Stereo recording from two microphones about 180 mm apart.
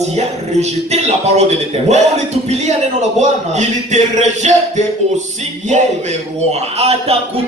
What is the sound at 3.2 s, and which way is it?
Speech, 40° right (ahead or behind).